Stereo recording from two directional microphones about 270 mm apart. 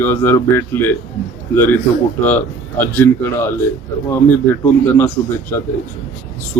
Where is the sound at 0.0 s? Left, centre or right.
Centre.